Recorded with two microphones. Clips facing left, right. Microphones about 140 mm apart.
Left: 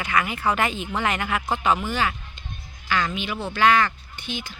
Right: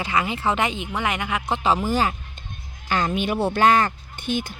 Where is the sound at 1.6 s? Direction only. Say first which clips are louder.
Right 3 dB; 35° right (ahead or behind); by 3.6 s 55° right (ahead or behind).